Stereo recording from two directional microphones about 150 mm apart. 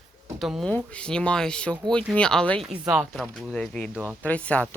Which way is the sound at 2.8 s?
5° right (ahead or behind).